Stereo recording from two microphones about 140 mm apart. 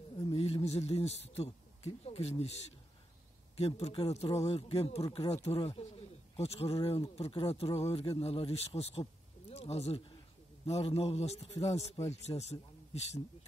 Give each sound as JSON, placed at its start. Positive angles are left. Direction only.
{"t": 0.3, "sound": "speech", "side_deg": 45}
{"t": 3.5, "sound": "a man's voice", "side_deg": 50}